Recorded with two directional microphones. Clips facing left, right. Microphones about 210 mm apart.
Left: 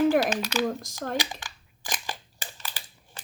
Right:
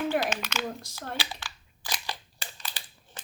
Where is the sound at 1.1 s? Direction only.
15° left (ahead or behind).